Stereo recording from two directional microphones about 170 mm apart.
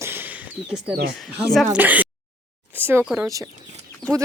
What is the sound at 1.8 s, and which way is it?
Speech, 10° right (ahead or behind).